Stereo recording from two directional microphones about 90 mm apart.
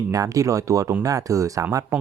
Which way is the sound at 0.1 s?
40° right (ahead or behind).